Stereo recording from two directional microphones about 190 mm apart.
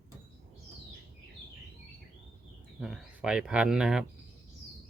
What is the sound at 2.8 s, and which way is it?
Speech, 5° right (ahead or behind).